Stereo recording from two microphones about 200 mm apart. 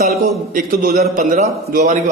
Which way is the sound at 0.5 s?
45° right (ahead or behind).